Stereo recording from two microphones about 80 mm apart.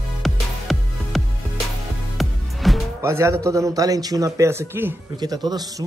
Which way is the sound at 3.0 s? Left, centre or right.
Right.